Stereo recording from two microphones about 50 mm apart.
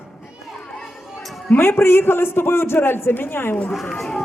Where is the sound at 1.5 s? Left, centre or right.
Left.